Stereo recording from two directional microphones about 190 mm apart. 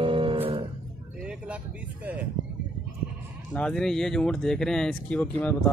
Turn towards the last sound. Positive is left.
turn(degrees=5)  # may be behind; listen again after turning